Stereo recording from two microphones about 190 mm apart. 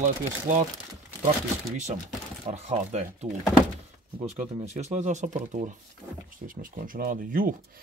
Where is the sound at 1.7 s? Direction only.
40° right (ahead or behind).